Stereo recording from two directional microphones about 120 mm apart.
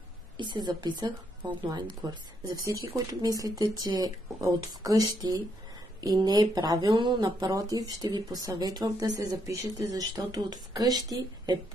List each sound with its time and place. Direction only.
0.4 s speech: 40° right (ahead or behind)